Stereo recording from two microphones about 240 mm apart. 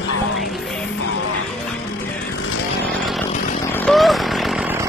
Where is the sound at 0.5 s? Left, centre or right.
Centre.